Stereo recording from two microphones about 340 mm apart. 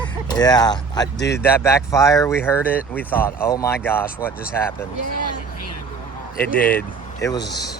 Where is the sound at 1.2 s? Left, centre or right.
Left.